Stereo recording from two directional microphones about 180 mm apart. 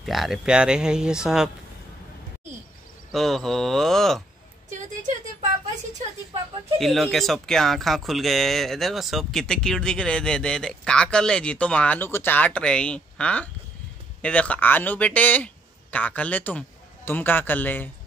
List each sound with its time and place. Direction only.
0.0 s speech: centre (ahead or behind)
3.1 s speech: centre (ahead or behind)
4.6 s a sound: 45° right (ahead or behind)
6.8 s speech: centre (ahead or behind)